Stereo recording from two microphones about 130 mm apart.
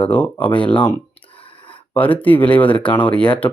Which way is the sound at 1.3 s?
45° left (ahead or behind).